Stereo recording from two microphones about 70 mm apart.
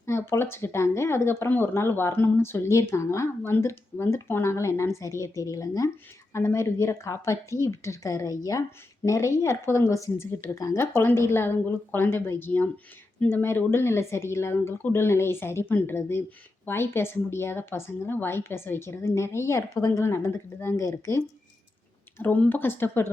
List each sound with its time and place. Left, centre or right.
0.0 s speech: left
6.3 s speech: left
22.2 s speech: left